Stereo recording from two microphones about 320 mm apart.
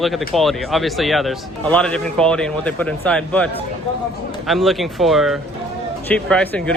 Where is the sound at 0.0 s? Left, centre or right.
Centre.